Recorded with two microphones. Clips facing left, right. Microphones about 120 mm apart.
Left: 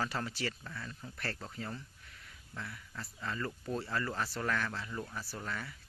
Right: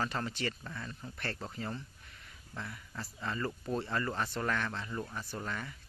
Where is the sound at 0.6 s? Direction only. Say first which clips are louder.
Right 2 dB; 10° right (ahead or behind).